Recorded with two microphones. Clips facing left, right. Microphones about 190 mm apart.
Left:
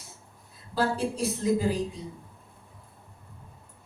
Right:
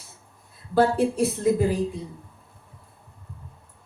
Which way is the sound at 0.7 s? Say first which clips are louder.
Right 7 dB; 60° right (ahead or behind).